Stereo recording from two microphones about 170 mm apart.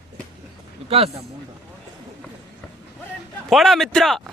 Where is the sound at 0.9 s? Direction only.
35° right (ahead or behind).